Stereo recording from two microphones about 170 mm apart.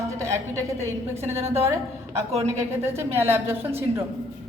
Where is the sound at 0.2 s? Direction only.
15° right (ahead or behind).